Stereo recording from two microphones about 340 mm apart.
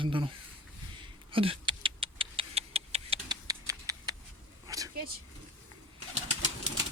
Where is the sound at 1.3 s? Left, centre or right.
Centre.